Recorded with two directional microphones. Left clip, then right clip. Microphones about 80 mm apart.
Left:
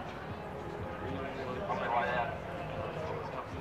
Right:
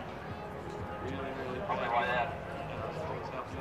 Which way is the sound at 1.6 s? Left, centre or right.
Right.